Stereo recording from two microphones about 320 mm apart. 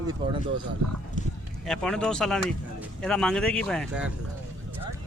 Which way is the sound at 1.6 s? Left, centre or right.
Centre.